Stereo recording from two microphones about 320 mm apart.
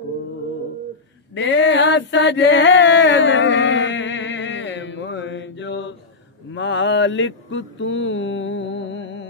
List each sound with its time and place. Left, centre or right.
1.3 s chant: left
6.5 s mantra: left